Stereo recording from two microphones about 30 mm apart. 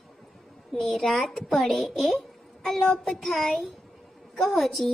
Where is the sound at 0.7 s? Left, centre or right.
Centre.